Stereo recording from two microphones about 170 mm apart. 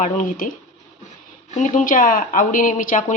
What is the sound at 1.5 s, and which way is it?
A woman's voice, 50° left (ahead or behind).